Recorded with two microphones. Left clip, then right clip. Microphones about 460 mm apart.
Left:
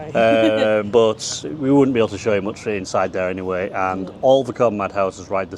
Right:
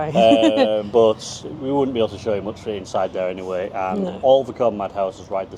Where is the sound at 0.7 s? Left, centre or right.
Left.